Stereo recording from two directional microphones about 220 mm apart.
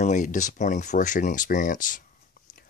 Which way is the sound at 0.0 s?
35° left (ahead or behind).